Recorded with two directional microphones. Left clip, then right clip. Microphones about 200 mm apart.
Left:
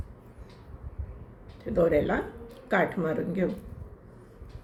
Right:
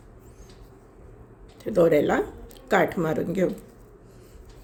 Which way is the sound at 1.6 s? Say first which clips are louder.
Right 5 dB; 50° right (ahead or behind).